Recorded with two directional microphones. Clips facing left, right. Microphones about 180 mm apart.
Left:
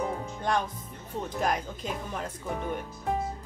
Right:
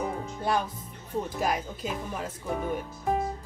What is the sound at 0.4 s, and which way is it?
Speech, 5° right (ahead or behind).